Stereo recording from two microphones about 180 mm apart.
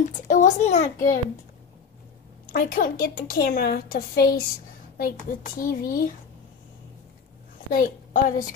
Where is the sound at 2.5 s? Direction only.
50° left (ahead or behind).